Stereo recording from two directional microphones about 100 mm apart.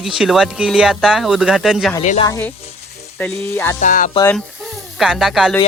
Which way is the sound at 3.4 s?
25° left (ahead or behind).